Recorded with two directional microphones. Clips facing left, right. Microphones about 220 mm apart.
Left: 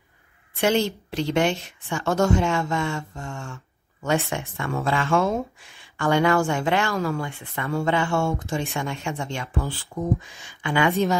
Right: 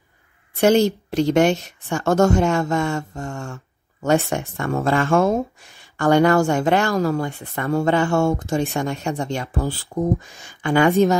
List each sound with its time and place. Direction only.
0.6 s speech: 45° right (ahead or behind)